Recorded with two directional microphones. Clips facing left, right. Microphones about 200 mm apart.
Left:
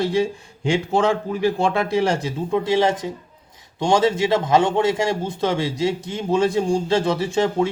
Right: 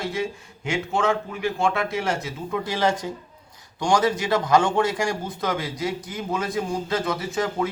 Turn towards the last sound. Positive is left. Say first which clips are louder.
# left 5 dB
turn(degrees=30)  # may be behind; listen again after turning